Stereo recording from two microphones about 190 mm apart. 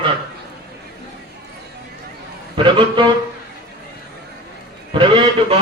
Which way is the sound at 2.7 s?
25° right (ahead or behind).